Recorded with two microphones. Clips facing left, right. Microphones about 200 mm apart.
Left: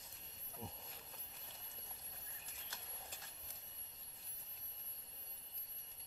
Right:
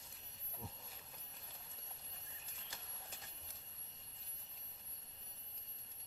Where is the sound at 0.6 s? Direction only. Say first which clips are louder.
Left 2 dB; 15° left (ahead or behind).